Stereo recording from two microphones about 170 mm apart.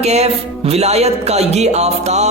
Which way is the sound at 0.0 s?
40° right (ahead or behind).